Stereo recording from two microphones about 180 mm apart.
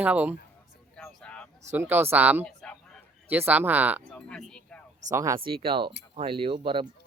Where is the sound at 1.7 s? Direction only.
10° right (ahead or behind).